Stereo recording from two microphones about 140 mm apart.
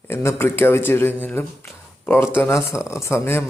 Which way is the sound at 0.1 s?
20° left (ahead or behind).